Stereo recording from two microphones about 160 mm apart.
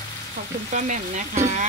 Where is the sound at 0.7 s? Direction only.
50° right (ahead or behind).